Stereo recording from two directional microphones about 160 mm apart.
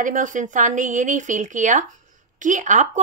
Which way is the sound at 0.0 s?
55° right (ahead or behind).